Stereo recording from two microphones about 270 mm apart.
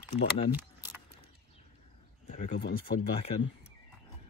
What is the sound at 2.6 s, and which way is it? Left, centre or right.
Speech, left.